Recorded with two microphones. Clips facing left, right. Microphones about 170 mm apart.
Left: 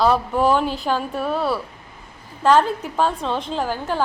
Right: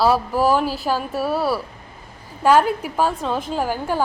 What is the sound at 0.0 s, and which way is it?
A woman's voice, 5° right (ahead or behind).